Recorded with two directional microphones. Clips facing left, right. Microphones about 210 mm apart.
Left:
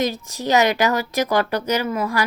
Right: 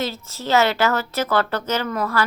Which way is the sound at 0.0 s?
15° left (ahead or behind).